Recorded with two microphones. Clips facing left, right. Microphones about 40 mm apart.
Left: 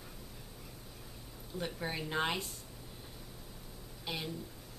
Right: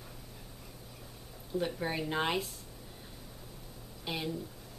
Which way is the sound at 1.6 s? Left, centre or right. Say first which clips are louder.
Right 4 dB; centre.